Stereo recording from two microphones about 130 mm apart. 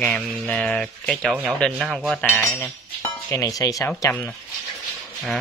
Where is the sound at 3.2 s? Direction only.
25° left (ahead or behind).